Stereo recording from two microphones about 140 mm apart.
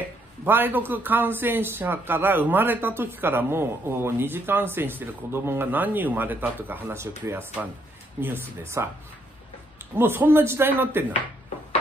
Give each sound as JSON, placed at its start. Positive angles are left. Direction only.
{"t": 0.5, "sound": "speech", "side_deg": -15}
{"t": 9.9, "sound": "speech", "side_deg": -15}